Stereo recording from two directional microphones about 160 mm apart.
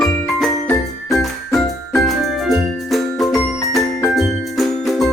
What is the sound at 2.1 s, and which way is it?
Music, centre (ahead or behind).